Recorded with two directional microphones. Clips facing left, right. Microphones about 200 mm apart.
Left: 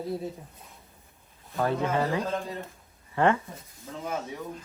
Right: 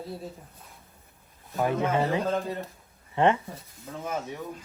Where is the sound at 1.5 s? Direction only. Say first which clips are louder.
Right 1 dB; 20° right (ahead or behind).